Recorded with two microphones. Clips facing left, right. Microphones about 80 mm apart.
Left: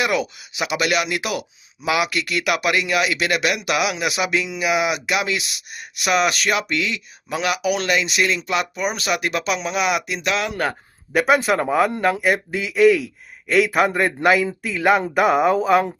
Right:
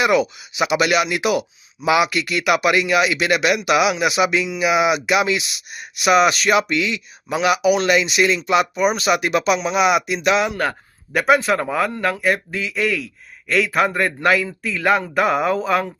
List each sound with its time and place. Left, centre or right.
0.0 s speech: centre
10.5 s speech: centre